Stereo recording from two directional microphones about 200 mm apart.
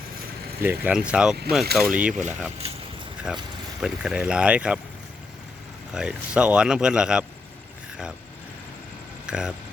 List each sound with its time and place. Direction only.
0.6 s speech: 10° right (ahead or behind)
2.6 s speech: 30° right (ahead or behind)
3.3 s speech: 5° right (ahead or behind)
5.9 s speech: 5° right (ahead or behind)
9.2 s speech: 5° right (ahead or behind)